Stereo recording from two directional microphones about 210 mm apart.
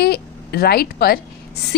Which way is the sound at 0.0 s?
50° left (ahead or behind).